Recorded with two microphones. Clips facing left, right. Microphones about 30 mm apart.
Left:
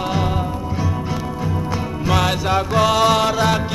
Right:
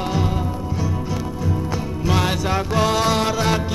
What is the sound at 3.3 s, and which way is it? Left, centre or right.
Music, left.